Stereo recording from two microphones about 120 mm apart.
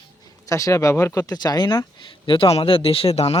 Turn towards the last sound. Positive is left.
turn(degrees=60)  # may be behind; listen again after turning